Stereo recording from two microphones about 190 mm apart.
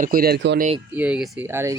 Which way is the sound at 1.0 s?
5° right (ahead or behind).